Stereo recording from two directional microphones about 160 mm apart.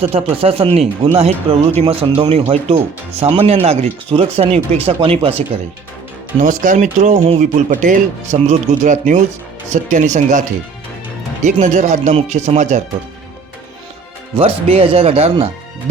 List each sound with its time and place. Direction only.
0.0 s speech: 35° right (ahead or behind)
6.4 s speech: 55° right (ahead or behind)
11.6 s speech: 50° right (ahead or behind)
14.3 s speech: 35° right (ahead or behind)